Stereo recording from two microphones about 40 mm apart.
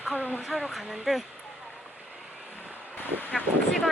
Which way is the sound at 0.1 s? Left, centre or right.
Left.